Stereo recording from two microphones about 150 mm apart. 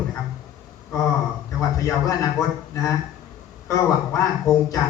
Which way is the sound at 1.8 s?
20° left (ahead or behind).